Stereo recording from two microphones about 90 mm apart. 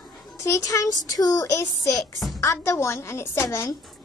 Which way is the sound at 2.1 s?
Centre (ahead or behind).